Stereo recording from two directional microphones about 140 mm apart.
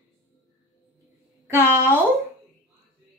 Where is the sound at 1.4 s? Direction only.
20° right (ahead or behind).